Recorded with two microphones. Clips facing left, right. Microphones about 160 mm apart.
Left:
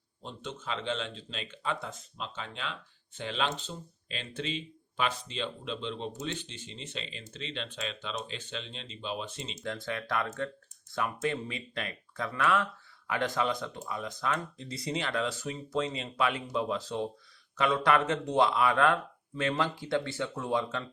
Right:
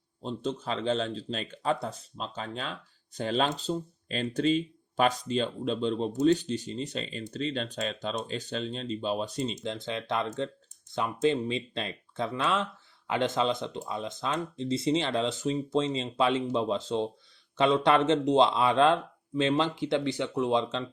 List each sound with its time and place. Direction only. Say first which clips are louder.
0.2 s speech: right 9 dB; 35° right (ahead or behind)
9.6 s speech: right 2 dB; 20° right (ahead or behind)